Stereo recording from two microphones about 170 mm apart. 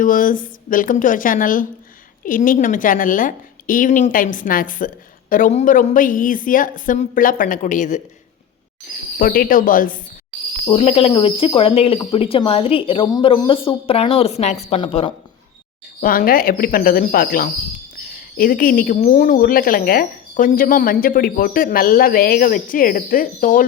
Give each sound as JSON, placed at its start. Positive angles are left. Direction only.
{"t": 0.0, "sound": "a woman's voice", "side_deg": 55}
{"t": 9.1, "sound": "a woman's voice", "side_deg": 55}
{"t": 10.7, "sound": "a woman's voice", "side_deg": 35}
{"t": 16.0, "sound": "a woman's voice", "side_deg": 55}